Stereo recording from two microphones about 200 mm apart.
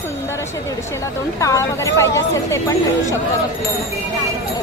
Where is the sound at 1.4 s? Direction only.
15° left (ahead or behind).